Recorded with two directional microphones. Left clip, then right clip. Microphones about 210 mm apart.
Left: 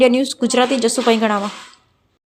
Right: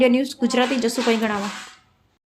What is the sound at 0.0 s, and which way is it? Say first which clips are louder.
Speech: left 4 dB; 10° left (ahead or behind).